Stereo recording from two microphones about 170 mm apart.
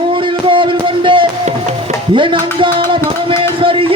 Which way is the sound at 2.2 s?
30° right (ahead or behind).